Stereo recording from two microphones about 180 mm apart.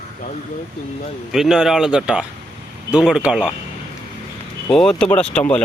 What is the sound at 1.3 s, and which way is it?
A man's voice, 5° right (ahead or behind).